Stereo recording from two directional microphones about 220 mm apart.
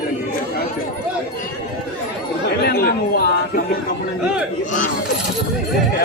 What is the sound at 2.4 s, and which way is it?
Chatter, 45° left (ahead or behind).